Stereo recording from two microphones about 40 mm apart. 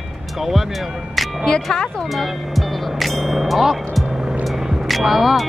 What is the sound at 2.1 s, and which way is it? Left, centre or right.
Speech, centre.